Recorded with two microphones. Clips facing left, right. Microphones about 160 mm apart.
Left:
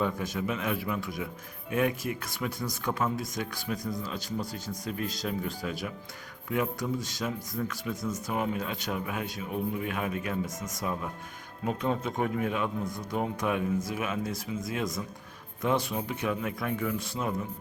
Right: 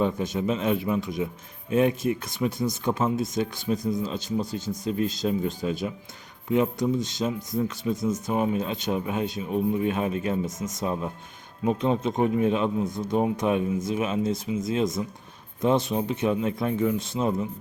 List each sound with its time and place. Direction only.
0.0 s speech: 25° right (ahead or behind)